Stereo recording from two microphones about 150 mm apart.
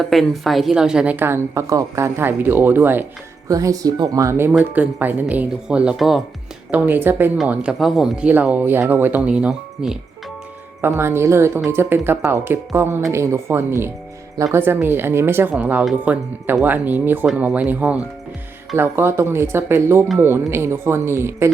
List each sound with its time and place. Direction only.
0.0 s speech: centre (ahead or behind)
10.8 s speech: 15° right (ahead or behind)